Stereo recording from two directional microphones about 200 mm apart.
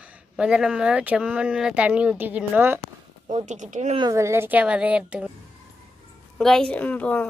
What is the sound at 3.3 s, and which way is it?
Speech, 35° right (ahead or behind).